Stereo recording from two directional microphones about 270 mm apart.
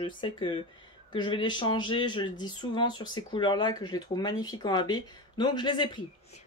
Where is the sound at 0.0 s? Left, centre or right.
Centre.